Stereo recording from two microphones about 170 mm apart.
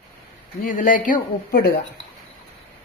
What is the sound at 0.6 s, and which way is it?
Speech, 50° left (ahead or behind).